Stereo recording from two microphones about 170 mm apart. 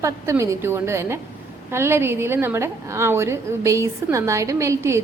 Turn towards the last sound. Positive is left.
turn(degrees=-15)  # may be behind; listen again after turning